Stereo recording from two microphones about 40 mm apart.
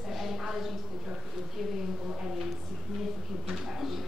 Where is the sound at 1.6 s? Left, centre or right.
Centre.